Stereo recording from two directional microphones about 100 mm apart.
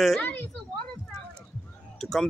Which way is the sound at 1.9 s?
5° left (ahead or behind).